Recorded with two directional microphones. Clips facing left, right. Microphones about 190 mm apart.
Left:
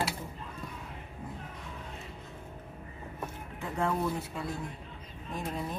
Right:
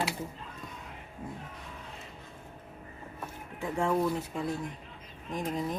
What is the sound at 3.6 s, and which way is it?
A woman's voice, 15° right (ahead or behind).